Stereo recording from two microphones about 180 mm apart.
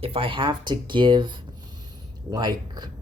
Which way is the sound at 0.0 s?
30° right (ahead or behind).